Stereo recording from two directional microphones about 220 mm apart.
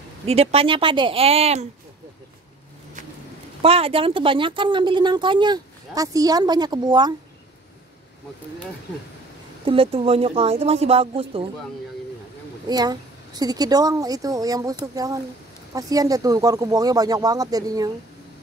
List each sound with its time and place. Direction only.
0.3 s speech: 25° right (ahead or behind)
3.6 s speech: 25° right (ahead or behind)
9.7 s speech: 25° right (ahead or behind)
12.6 s speech: 20° right (ahead or behind)